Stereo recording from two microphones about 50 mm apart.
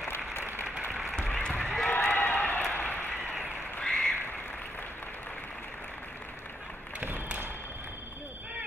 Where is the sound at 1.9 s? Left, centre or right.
Left.